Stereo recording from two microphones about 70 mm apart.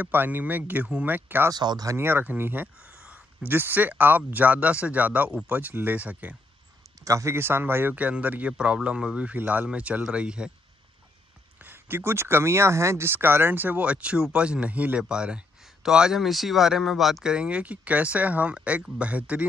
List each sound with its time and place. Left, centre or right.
0.0 s speech: right
1.5 s speech: right
2.0 s speech: right
2.8 s speech: centre
7.0 s speech: right; by 10.5 s centre
11.5 s speech: right